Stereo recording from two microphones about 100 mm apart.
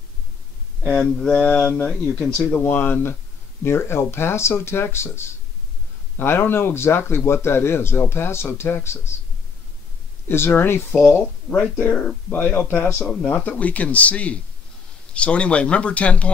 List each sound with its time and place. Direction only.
0.8 s speech: 5° left (ahead or behind)
2.5 s speech: 20° left (ahead or behind)
10.2 s speech: 20° left (ahead or behind)
11.4 s speech: 10° left (ahead or behind)